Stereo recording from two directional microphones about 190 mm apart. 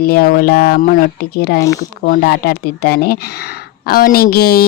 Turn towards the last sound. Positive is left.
turn(degrees=55)  # may be behind; listen again after turning